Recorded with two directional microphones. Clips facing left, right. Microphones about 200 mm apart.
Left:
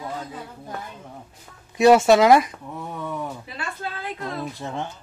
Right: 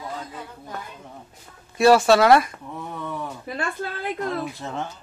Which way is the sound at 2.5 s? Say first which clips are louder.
Left 1 dB; 5° left (ahead or behind).